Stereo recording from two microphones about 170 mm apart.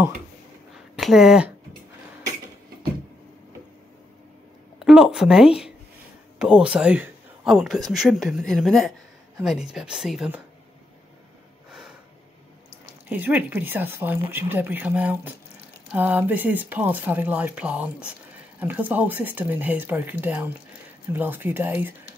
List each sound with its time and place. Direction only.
0.9 s speech: centre (ahead or behind)
4.7 s a woman's voice: centre (ahead or behind)
13.1 s speech: 10° right (ahead or behind)